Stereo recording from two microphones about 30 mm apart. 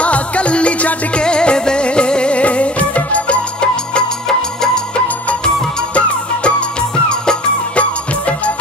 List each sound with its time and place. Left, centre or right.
0.0 s music: left
1.2 s music: left
2.4 s music: left
7.7 s music: left